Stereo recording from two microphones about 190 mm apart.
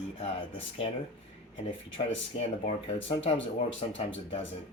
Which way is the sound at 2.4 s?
35° left (ahead or behind).